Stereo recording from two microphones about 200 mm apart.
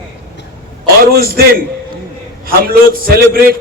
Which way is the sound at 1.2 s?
50° right (ahead or behind).